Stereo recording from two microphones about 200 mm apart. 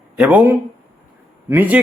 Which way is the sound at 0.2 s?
5° right (ahead or behind).